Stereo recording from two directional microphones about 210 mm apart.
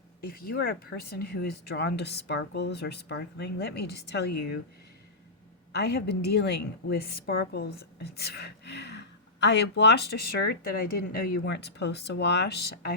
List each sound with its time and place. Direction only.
0.2 s a woman's voice: 45° left (ahead or behind)
5.7 s a woman's voice: 50° left (ahead or behind)